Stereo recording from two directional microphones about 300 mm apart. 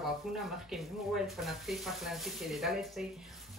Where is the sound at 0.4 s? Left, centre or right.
Centre.